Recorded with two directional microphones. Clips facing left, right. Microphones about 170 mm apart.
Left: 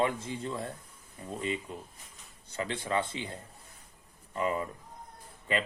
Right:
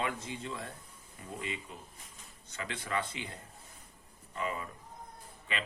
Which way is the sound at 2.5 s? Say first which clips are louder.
Left 5 dB; 30° left (ahead or behind).